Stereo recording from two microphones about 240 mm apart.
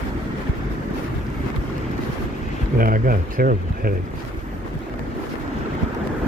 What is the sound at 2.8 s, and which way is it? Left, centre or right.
Speech, right.